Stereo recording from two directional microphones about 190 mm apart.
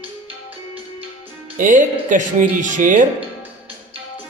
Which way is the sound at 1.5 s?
40° right (ahead or behind).